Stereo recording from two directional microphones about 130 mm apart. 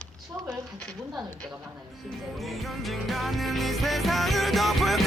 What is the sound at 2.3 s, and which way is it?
Music, centre (ahead or behind).